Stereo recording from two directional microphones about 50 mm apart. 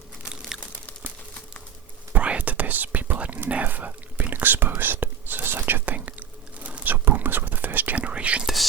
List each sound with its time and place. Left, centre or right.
2.1 s whispering: right
6.9 s whispering: right
7.9 s whispering: right